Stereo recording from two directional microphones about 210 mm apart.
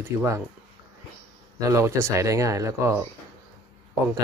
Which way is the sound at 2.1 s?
15° right (ahead or behind).